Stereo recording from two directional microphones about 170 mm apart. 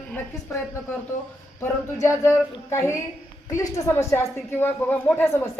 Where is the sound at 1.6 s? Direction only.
15° left (ahead or behind).